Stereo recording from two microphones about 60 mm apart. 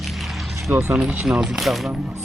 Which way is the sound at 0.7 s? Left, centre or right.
Right.